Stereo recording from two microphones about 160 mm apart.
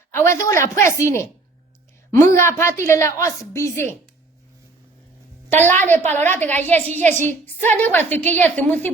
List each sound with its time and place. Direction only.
0.1 s a woman's voice: 15° left (ahead or behind)
5.5 s a woman's voice: 45° right (ahead or behind)
5.8 s a woman's voice: 10° left (ahead or behind)
6.8 s a woman's voice: 45° right (ahead or behind)
7.1 s a woman's voice: 15° left (ahead or behind)